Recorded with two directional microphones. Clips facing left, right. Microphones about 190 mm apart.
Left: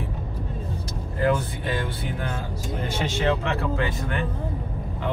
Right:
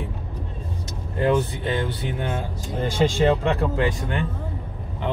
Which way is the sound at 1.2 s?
25° right (ahead or behind).